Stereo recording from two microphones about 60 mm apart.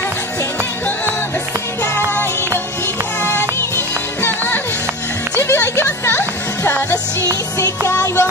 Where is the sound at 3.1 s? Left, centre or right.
Left.